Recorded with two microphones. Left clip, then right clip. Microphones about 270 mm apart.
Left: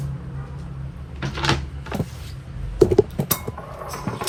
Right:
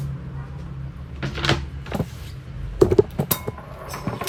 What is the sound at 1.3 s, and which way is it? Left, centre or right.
Cupboard open or close, centre.